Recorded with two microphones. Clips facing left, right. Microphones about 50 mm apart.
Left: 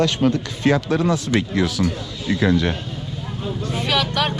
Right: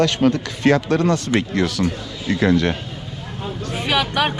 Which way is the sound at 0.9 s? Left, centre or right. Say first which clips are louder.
Right 2 dB; right.